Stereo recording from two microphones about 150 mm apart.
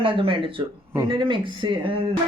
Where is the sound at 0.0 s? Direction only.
35° right (ahead or behind).